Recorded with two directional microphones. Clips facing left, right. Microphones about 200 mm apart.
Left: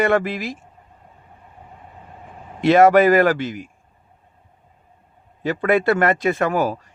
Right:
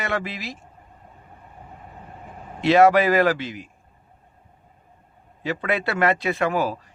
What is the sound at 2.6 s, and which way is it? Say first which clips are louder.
Speech: left 3 dB; 50° left (ahead or behind).